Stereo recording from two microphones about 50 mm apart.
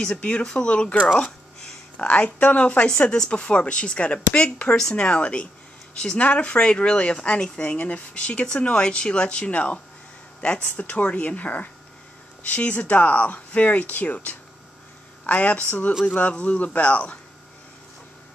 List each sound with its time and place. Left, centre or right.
0.0 s speech: left
1.2 s a sound: centre
2.0 s a woman's voice: left